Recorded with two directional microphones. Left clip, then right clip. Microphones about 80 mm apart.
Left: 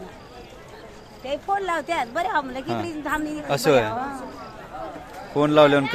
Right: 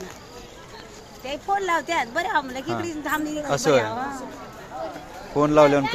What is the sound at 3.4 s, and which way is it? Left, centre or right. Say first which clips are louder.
Speech: left 1 dB; left.